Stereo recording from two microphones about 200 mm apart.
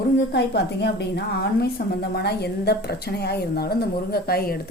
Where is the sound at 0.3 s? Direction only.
55° left (ahead or behind).